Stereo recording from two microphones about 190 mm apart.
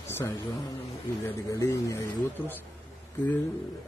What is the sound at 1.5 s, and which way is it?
Speech, 15° left (ahead or behind).